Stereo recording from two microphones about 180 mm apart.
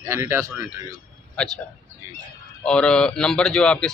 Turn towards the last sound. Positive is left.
turn(degrees=5)  # may be behind; listen again after turning